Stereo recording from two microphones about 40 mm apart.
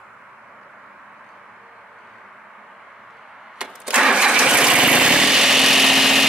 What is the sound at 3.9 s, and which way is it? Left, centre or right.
Engine starting, right.